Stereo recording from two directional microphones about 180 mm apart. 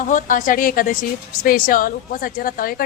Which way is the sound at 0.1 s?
45° left (ahead or behind).